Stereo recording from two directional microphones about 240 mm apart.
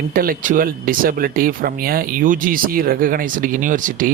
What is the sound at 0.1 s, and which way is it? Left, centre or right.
Speech, right.